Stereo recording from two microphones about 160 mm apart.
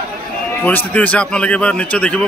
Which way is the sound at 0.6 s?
10° left (ahead or behind).